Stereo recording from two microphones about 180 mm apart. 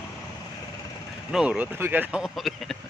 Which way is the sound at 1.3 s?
5° right (ahead or behind).